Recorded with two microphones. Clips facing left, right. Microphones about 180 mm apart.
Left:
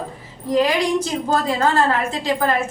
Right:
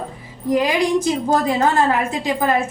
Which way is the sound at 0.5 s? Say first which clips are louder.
Even; 15° right (ahead or behind).